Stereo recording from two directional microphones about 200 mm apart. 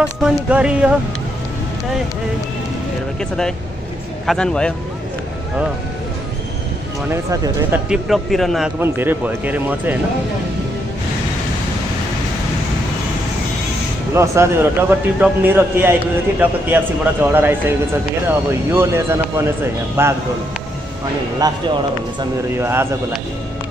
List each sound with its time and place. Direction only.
0.0 s speech: 5° right (ahead or behind)
3.2 s speech: 5° left (ahead or behind)
7.1 s a man's voice: 15° right (ahead or behind)
7.9 s a man's voice: centre (ahead or behind)
14.1 s a man's voice: 15° right (ahead or behind)
21.4 s a man's voice: 20° right (ahead or behind)